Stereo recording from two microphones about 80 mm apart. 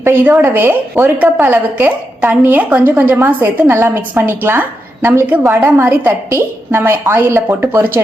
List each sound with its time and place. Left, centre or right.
0.0 s a woman's voice: right